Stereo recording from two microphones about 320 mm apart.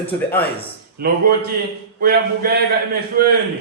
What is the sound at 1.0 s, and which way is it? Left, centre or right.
A man's voice, right.